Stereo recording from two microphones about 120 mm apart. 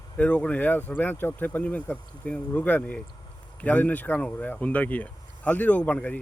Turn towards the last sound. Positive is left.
turn(degrees=10)  # may be behind; listen again after turning